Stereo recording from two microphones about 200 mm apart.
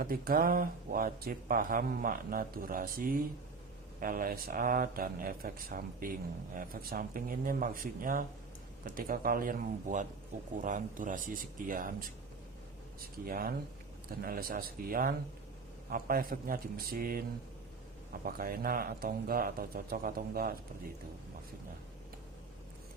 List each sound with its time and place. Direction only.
0.0 s speech: 45° right (ahead or behind)
13.2 s speech: 45° right (ahead or behind)
18.3 s speech: 45° right (ahead or behind)